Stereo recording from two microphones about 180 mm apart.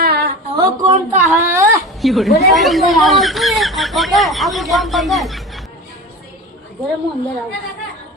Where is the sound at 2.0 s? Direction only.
Centre (ahead or behind).